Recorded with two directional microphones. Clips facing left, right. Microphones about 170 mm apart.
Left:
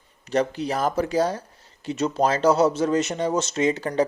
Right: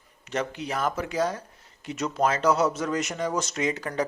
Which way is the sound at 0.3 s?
35° left (ahead or behind).